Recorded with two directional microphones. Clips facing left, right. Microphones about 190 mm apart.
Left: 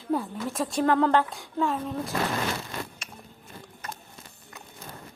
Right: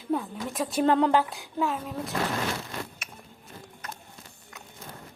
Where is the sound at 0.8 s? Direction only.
20° right (ahead or behind).